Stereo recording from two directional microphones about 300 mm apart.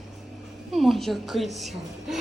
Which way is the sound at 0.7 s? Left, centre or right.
Centre.